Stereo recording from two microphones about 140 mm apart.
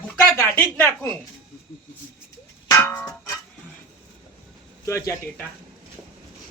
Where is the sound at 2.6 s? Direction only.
15° left (ahead or behind).